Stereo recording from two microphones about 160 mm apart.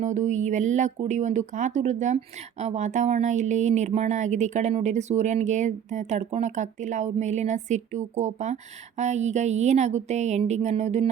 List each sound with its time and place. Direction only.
0.0 s speech: 50° right (ahead or behind)